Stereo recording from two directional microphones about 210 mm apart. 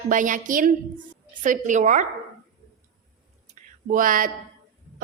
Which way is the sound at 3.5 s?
40° right (ahead or behind).